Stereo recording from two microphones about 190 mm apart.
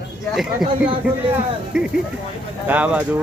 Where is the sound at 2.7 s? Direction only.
10° right (ahead or behind).